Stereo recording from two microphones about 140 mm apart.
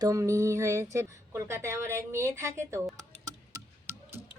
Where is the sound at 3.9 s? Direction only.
15° right (ahead or behind).